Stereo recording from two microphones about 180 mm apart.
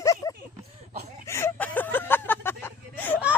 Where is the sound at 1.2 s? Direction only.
15° left (ahead or behind).